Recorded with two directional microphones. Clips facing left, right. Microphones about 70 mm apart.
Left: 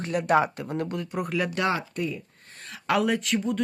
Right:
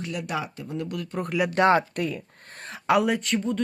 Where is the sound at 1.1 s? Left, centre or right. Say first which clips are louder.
Even; centre.